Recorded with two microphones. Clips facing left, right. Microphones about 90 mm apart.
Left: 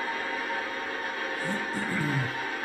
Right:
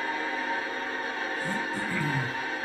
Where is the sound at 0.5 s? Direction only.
20° right (ahead or behind).